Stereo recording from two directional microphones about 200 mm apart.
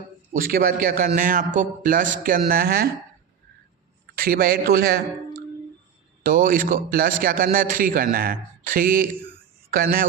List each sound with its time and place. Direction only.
0.3 s a man's voice: 45° right (ahead or behind)
4.1 s a man's voice: 50° right (ahead or behind)
6.2 s a man's voice: 45° right (ahead or behind)